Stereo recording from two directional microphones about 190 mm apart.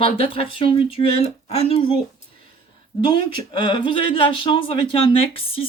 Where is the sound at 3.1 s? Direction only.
25° left (ahead or behind).